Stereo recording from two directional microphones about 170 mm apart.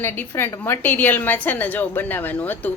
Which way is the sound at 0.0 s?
15° left (ahead or behind).